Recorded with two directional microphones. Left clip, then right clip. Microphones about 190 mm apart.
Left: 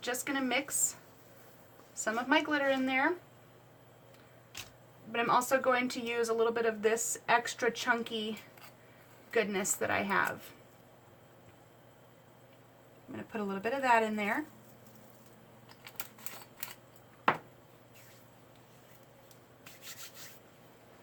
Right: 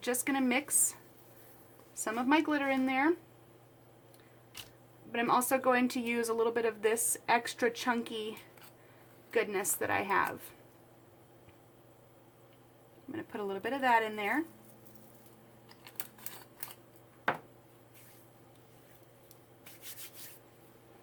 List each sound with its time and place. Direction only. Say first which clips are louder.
0.0 s speech: right 2 dB; 45° right (ahead or behind)
2.0 s a woman's voice: even; 40° right (ahead or behind)
5.1 s speech: left 1 dB; 40° right (ahead or behind)
9.3 s speech: left 1 dB; 45° right (ahead or behind)
13.3 s a woman's voice: left 2 dB; 40° right (ahead or behind)